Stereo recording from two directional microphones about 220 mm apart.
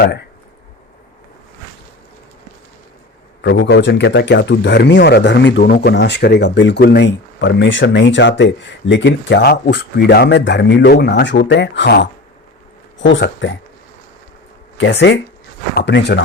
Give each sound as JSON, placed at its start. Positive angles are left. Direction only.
{"t": 3.4, "sound": "speech", "side_deg": 50}
{"t": 14.8, "sound": "speech", "side_deg": 55}